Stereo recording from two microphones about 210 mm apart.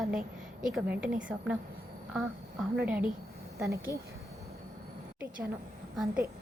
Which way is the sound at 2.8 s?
10° right (ahead or behind).